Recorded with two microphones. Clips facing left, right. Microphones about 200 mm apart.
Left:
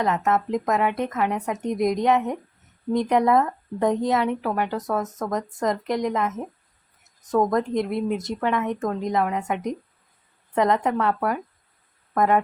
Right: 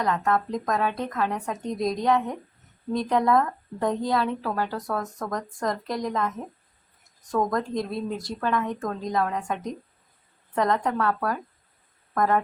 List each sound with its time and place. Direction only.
0.0 s speech: 20° left (ahead or behind)